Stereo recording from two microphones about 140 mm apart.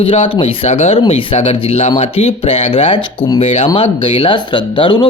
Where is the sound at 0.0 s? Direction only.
40° left (ahead or behind).